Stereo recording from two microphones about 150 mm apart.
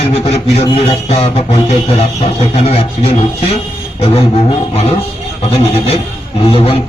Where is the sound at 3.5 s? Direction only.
40° left (ahead or behind).